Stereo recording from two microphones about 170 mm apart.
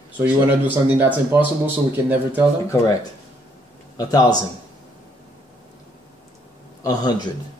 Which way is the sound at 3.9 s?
20° left (ahead or behind).